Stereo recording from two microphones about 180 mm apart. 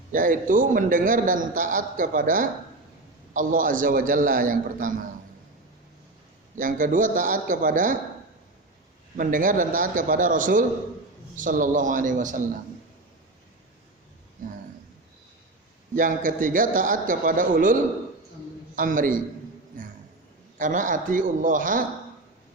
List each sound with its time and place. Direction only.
0.1 s a man's voice: 50° right (ahead or behind)
6.6 s a man's voice: 50° right (ahead or behind)
9.1 s a man's voice: 50° right (ahead or behind)
14.4 s a man's voice: 50° right (ahead or behind)
16.0 s a man's voice: 50° right (ahead or behind)
18.8 s a man's voice: 50° right (ahead or behind)
19.8 s a sound: 45° right (ahead or behind)
20.6 s a man's voice: 45° right (ahead or behind)